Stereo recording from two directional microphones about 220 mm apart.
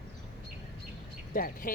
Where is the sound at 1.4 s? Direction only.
40° left (ahead or behind).